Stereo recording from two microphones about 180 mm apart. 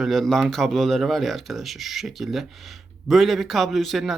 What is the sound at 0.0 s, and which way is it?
Speech, centre (ahead or behind).